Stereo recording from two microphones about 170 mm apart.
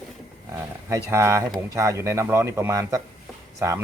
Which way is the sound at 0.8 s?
15° right (ahead or behind).